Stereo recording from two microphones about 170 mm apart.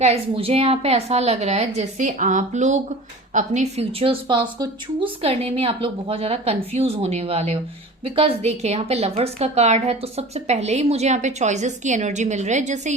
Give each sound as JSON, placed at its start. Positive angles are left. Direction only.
{"t": 0.0, "sound": "a woman's voice", "side_deg": -35}